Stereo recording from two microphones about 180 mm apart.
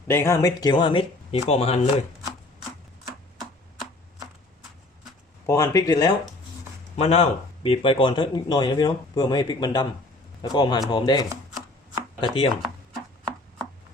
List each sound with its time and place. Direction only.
0.1 s speech: 15° left (ahead or behind); by 1.8 s 35° left (ahead or behind)
5.5 s speech: 20° left (ahead or behind)
6.9 s speech: 35° left (ahead or behind)